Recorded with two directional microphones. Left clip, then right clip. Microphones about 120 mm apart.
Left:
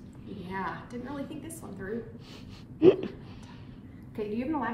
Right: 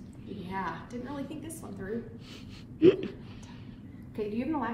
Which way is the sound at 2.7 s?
15° left (ahead or behind).